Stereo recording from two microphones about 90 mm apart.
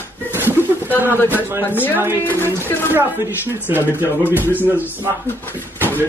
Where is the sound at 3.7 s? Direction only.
20° right (ahead or behind).